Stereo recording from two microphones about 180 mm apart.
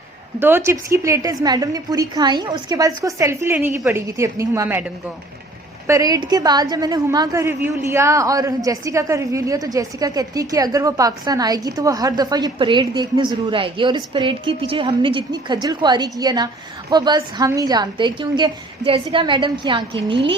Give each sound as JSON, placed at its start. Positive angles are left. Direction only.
{"t": 0.3, "sound": "a woman's voice", "side_deg": -10}
{"t": 5.9, "sound": "a woman's voice", "side_deg": -20}